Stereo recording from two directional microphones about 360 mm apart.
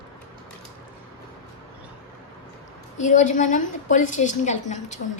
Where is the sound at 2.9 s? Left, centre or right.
Centre.